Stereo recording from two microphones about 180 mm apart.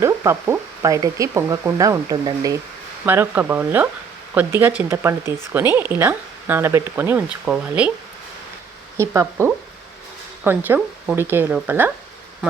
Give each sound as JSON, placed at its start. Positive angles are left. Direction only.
{"t": 0.0, "sound": "speech", "side_deg": -15}
{"t": 9.0, "sound": "speech", "side_deg": -15}